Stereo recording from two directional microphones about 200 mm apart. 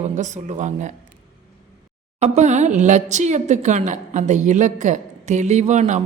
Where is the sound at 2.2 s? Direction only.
35° right (ahead or behind).